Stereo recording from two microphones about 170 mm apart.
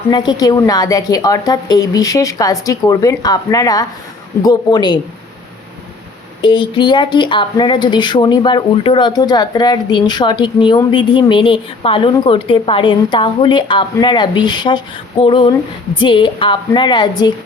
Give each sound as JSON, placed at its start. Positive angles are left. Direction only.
{"t": 0.1, "sound": "speech", "side_deg": 25}
{"t": 6.4, "sound": "speech", "side_deg": 30}